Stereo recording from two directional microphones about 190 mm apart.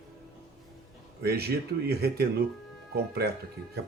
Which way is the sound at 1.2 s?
55° right (ahead or behind).